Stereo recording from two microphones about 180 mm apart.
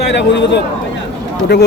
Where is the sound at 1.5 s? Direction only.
70° left (ahead or behind).